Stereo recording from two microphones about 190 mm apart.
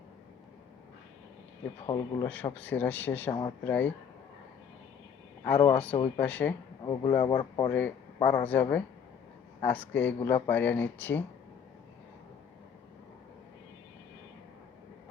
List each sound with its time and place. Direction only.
1.9 s speech: 15° left (ahead or behind)
5.7 s speech: 5° left (ahead or behind)
6.8 s speech: 20° left (ahead or behind)
7.7 s speech: 10° left (ahead or behind)